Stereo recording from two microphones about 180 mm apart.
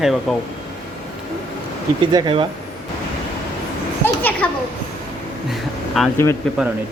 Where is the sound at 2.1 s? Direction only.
25° right (ahead or behind).